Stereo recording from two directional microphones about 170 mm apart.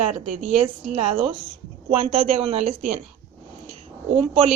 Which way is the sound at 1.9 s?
35° right (ahead or behind).